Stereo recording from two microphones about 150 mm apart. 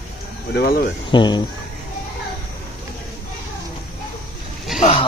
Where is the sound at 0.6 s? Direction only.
75° left (ahead or behind).